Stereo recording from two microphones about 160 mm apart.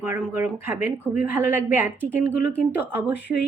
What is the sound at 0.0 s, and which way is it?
A woman's voice, 15° right (ahead or behind).